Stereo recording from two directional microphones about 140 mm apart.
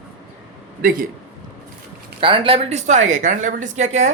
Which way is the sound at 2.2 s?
40° right (ahead or behind).